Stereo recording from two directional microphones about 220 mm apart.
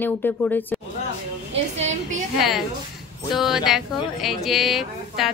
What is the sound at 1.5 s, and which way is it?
Speech, 30° right (ahead or behind).